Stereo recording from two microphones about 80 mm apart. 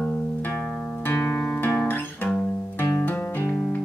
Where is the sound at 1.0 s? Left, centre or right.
Left.